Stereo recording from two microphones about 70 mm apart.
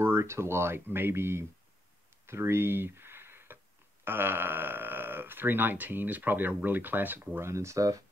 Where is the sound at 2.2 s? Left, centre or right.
Right.